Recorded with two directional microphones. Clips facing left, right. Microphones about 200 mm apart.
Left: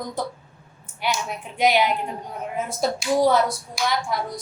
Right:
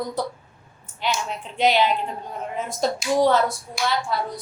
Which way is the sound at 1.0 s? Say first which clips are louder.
Even; 10° left (ahead or behind).